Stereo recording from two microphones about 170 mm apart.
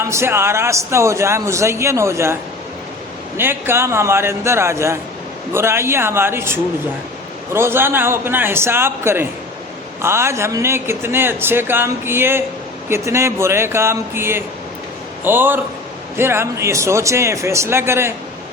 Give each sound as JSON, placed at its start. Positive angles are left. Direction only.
{"t": 0.0, "sound": "speech", "side_deg": -15}